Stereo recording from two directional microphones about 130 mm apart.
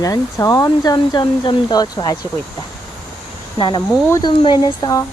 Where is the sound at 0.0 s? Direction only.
25° left (ahead or behind).